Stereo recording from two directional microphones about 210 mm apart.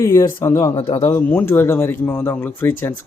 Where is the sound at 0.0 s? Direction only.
15° left (ahead or behind).